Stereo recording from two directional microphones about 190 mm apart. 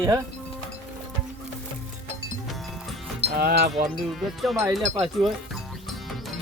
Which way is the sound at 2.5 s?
Centre (ahead or behind).